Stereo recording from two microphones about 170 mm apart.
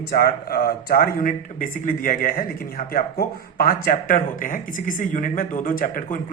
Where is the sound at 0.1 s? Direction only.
65° left (ahead or behind).